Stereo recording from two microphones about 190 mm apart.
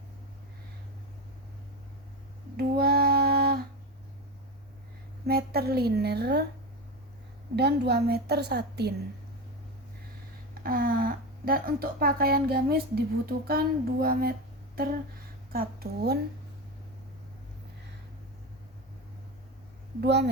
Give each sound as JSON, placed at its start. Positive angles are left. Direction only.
{"t": 2.6, "sound": "female singing", "side_deg": -55}
{"t": 5.2, "sound": "a woman's voice", "side_deg": -55}
{"t": 7.5, "sound": "a woman's voice", "side_deg": -60}
{"t": 10.5, "sound": "speech", "side_deg": -50}
{"t": 15.5, "sound": "speech", "side_deg": -50}
{"t": 20.0, "sound": "a woman's voice", "side_deg": -65}